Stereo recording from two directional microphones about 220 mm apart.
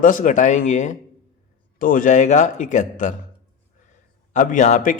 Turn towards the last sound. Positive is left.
turn(degrees=35)  # may be behind; listen again after turning